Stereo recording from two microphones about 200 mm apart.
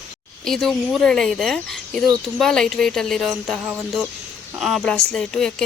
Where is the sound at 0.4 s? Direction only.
Centre (ahead or behind).